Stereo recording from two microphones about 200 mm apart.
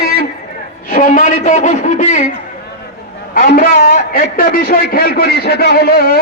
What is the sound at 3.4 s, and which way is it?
A man's voice, 45° left (ahead or behind).